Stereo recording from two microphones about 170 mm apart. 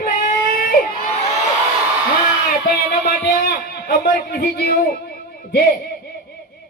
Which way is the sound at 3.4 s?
65° left (ahead or behind).